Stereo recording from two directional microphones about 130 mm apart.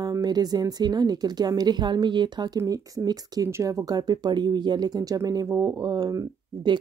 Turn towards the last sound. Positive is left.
turn(degrees=-30)  # may be behind; listen again after turning